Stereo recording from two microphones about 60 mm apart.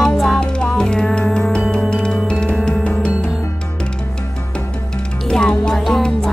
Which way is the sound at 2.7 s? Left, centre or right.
Centre.